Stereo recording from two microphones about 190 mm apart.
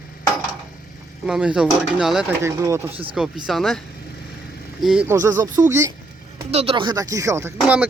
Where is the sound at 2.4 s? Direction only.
15° right (ahead or behind).